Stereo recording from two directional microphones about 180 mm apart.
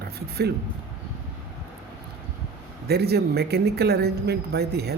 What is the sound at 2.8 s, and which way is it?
A woman's voice, 65° right (ahead or behind).